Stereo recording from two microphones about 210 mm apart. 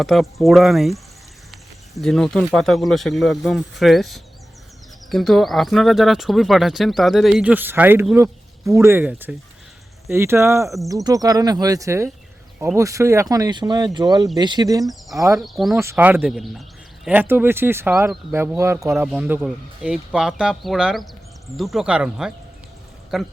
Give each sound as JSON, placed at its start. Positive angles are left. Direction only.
{"t": 0.0, "sound": "speech", "side_deg": 0}
{"t": 15.4, "sound": "speech", "side_deg": 0}